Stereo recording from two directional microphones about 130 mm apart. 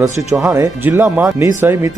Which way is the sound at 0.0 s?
25° right (ahead or behind).